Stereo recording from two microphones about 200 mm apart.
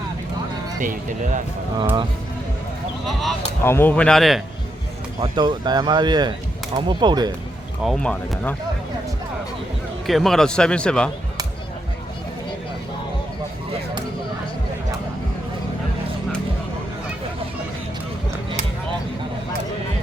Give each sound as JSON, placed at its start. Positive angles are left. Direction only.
{"t": 0.8, "sound": "speech", "side_deg": -40}
{"t": 3.1, "sound": "speech", "side_deg": 0}
{"t": 3.6, "sound": "speech", "side_deg": 10}
{"t": 5.2, "sound": "speech", "side_deg": -20}
{"t": 7.8, "sound": "speech", "side_deg": 0}
{"t": 10.1, "sound": "speech", "side_deg": 0}